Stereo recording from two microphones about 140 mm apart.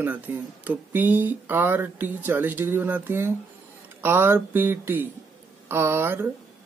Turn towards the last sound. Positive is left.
turn(degrees=-15)  # may be behind; listen again after turning